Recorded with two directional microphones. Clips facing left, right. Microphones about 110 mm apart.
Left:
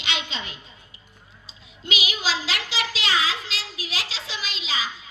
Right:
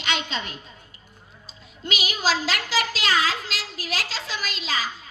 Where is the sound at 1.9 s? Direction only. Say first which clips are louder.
Right 3 dB; 45° right (ahead or behind).